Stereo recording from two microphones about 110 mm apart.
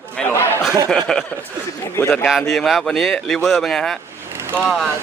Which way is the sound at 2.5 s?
Centre (ahead or behind).